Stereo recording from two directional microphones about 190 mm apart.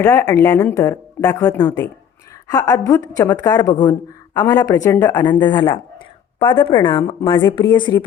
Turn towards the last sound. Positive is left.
turn(degrees=25)  # may be behind; listen again after turning